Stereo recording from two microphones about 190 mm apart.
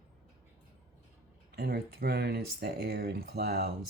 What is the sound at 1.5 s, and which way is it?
Speech, 60° right (ahead or behind).